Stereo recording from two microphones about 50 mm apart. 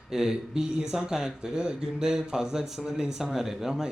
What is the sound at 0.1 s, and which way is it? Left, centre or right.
Speech, centre.